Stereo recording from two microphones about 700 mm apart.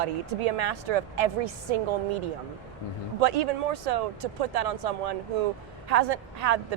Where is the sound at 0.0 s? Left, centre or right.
Right.